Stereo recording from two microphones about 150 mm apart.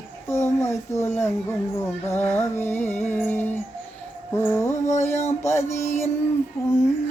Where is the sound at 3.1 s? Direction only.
15° left (ahead or behind).